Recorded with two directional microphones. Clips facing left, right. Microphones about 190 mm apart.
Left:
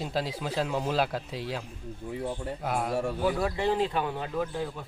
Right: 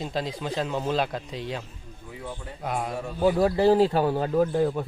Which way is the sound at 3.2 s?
35° right (ahead or behind).